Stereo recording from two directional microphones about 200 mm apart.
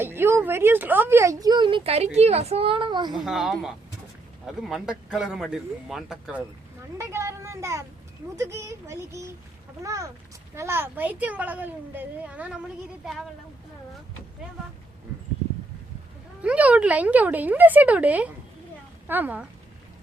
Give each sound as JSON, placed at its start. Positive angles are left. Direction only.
{"t": 0.0, "sound": "a woman's voice", "side_deg": -10}
{"t": 3.1, "sound": "speech", "side_deg": 0}
{"t": 7.0, "sound": "speech", "side_deg": -15}
{"t": 16.4, "sound": "speech", "side_deg": -5}